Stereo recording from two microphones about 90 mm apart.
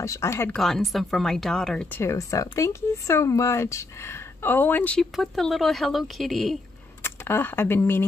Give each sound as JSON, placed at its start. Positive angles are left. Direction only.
{"t": 0.0, "sound": "speech", "side_deg": 35}
{"t": 0.5, "sound": "a woman's voice", "side_deg": 5}
{"t": 2.0, "sound": "speech", "side_deg": 35}
{"t": 5.1, "sound": "a woman's voice", "side_deg": 0}
{"t": 7.0, "sound": "speech", "side_deg": 25}